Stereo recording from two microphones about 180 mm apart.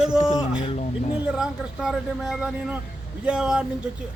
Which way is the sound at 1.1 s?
5° right (ahead or behind).